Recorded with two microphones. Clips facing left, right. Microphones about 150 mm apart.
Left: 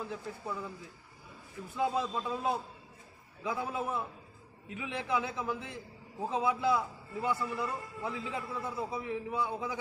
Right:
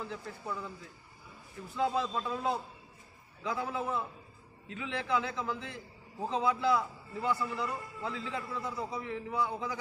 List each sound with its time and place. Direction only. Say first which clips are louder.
0.0 s a man's voice: left 1 dB; 15° left (ahead or behind)
1.7 s a man's voice: even; 15° left (ahead or behind)